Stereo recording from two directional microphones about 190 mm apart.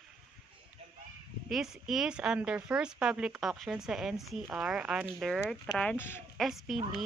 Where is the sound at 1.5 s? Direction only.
Centre (ahead or behind).